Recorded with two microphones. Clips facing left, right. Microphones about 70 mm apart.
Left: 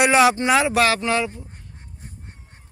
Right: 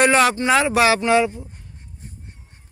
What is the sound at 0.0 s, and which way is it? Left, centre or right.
Speech, centre.